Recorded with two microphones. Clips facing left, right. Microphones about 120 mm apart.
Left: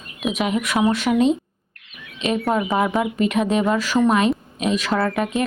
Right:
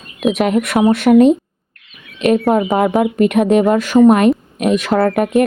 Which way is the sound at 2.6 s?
50° right (ahead or behind).